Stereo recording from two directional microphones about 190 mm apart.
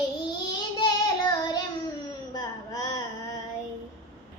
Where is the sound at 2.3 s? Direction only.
20° left (ahead or behind).